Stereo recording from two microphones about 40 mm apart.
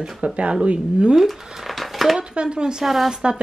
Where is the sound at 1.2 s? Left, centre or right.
Centre.